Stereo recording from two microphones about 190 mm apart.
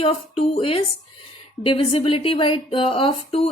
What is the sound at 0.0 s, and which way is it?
Speech, 30° left (ahead or behind).